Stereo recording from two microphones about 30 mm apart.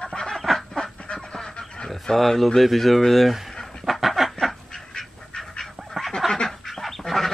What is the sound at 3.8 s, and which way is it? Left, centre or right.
Chicken, centre.